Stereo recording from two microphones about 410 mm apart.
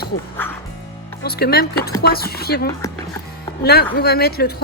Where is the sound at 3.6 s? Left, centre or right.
Left.